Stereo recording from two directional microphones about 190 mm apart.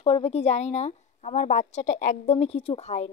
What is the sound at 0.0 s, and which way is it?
A woman's voice, 30° left (ahead or behind).